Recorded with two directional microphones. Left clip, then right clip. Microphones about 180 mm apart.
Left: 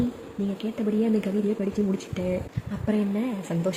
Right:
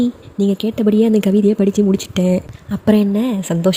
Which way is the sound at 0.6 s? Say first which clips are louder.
Right 10 dB; 55° right (ahead or behind).